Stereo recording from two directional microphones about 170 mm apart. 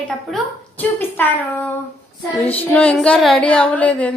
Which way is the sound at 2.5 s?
10° left (ahead or behind).